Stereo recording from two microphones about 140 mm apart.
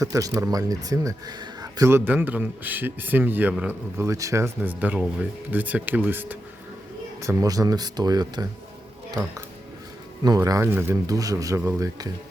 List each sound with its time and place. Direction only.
0.0 s speech: 25° right (ahead or behind)
7.2 s speech: 25° right (ahead or behind)
10.2 s speech: 25° right (ahead or behind)